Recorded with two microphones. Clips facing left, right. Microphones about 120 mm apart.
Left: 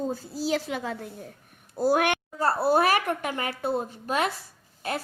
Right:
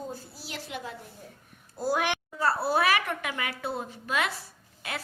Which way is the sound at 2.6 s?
45° left (ahead or behind).